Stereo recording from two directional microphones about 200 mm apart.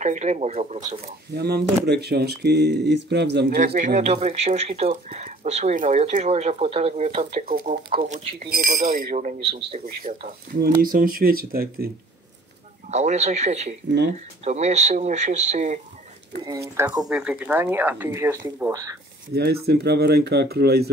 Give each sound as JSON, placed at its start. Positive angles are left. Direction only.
{"t": 0.0, "sound": "speech", "side_deg": -35}
{"t": 1.3, "sound": "speech", "side_deg": -55}
{"t": 3.4, "sound": "speech", "side_deg": -45}
{"t": 8.5, "sound": "speech", "side_deg": -45}
{"t": 10.0, "sound": "speech", "side_deg": -45}
{"t": 12.9, "sound": "speech", "side_deg": -35}
{"t": 13.8, "sound": "speech", "side_deg": -60}
{"t": 14.1, "sound": "speech", "side_deg": -35}
{"t": 16.4, "sound": "speech", "side_deg": -15}
{"t": 17.0, "sound": "speech", "side_deg": -5}
{"t": 19.3, "sound": "speech", "side_deg": -50}